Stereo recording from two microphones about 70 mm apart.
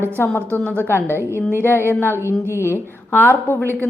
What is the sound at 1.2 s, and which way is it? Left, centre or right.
Speech, right.